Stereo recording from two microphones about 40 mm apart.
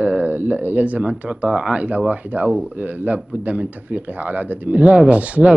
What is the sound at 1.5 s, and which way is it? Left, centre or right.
Speech, right.